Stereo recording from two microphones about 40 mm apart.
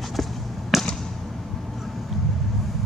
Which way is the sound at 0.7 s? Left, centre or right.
Centre.